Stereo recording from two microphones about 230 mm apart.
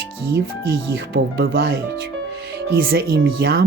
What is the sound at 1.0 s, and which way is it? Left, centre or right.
Speech, right.